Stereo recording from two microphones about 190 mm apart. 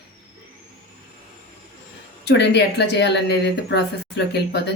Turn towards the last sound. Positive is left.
turn(degrees=60)  # may be behind; listen again after turning